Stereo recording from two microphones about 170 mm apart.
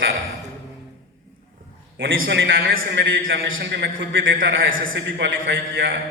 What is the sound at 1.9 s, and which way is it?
A man's voice, 90° right.